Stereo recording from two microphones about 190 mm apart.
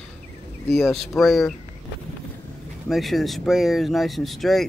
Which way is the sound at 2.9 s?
Centre (ahead or behind).